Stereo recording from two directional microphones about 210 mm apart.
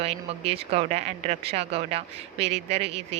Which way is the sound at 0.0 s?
30° right (ahead or behind).